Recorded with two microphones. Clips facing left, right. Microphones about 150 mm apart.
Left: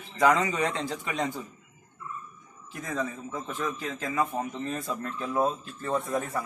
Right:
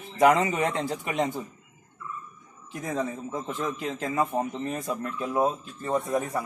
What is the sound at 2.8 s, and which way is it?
A man's voice, 25° right (ahead or behind).